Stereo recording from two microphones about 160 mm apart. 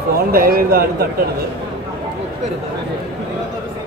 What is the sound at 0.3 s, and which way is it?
Speech, 65° right (ahead or behind).